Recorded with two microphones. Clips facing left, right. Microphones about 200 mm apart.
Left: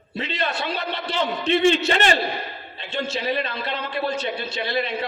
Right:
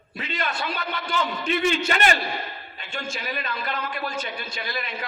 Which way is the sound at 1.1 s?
30° left (ahead or behind).